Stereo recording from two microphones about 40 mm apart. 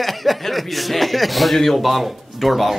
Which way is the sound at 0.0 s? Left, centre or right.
Centre.